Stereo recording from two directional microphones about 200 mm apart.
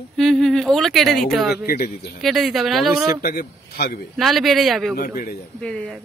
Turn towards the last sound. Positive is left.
turn(degrees=0)  # may be behind; listen again after turning